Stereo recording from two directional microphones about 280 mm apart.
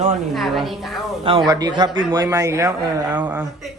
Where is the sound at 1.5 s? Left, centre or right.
Centre.